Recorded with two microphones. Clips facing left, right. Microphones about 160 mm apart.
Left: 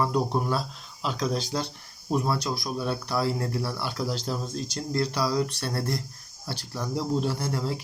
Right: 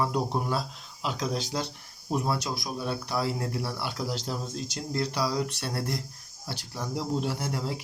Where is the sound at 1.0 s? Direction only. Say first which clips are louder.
Left 2 dB; 15° right (ahead or behind).